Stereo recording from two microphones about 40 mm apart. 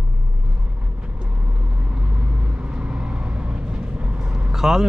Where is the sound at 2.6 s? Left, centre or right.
Right; by 4.9 s centre.